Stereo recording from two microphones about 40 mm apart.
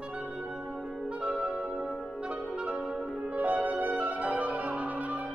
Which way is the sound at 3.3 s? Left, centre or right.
Right.